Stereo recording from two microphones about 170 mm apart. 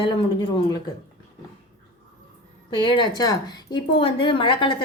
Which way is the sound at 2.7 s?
25° left (ahead or behind).